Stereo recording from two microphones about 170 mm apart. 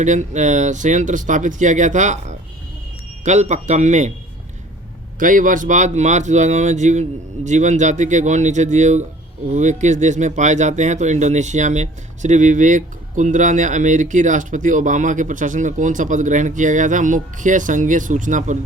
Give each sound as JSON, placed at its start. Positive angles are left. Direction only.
{"t": 0.0, "sound": "speech", "side_deg": -45}
{"t": 5.2, "sound": "speech", "side_deg": -50}